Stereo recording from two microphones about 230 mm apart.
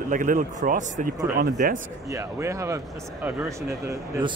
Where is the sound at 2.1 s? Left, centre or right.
Centre.